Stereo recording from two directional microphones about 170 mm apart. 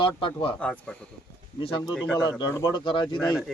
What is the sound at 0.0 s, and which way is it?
Speech, 30° left (ahead or behind).